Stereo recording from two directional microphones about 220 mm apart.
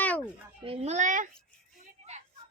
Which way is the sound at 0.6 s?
25° right (ahead or behind).